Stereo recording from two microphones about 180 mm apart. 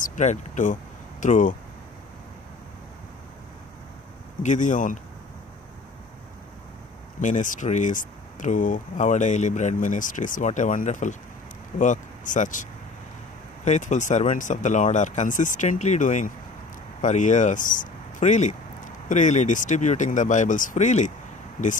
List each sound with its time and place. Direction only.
0.0 s speech: 45° left (ahead or behind)
4.4 s speech: 45° left (ahead or behind)
7.2 s speech: 45° left (ahead or behind)
13.7 s speech: 40° left (ahead or behind)